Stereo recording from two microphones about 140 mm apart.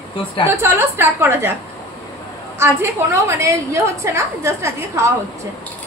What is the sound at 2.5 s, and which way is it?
A woman's voice, 20° right (ahead or behind).